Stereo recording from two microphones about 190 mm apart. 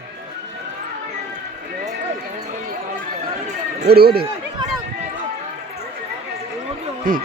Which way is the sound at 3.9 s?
55° right (ahead or behind).